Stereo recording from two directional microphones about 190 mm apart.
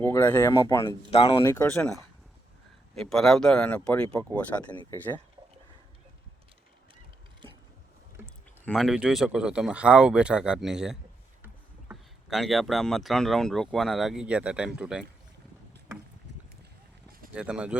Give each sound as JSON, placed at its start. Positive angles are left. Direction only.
{"t": 0.0, "sound": "speech", "side_deg": 10}
{"t": 1.1, "sound": "speech", "side_deg": 30}
{"t": 1.7, "sound": "speech", "side_deg": 0}
{"t": 8.2, "sound": "a sound", "side_deg": -10}
{"t": 8.6, "sound": "speech", "side_deg": 0}
{"t": 17.3, "sound": "speech", "side_deg": -5}